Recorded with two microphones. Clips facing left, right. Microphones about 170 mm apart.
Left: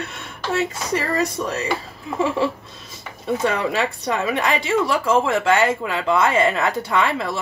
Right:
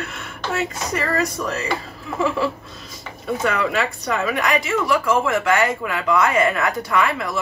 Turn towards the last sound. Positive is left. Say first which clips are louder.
# even
turn(degrees=30)  # may be behind; listen again after turning